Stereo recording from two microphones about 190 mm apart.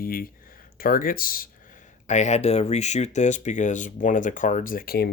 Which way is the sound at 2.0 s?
40° left (ahead or behind).